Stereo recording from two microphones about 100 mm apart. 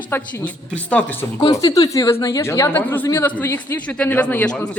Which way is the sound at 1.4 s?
35° left (ahead or behind).